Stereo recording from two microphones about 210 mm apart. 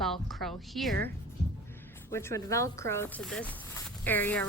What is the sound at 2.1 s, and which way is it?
A woman's voice, 15° left (ahead or behind).